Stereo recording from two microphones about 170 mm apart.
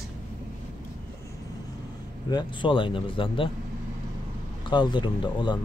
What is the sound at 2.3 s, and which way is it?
Speech, 30° left (ahead or behind).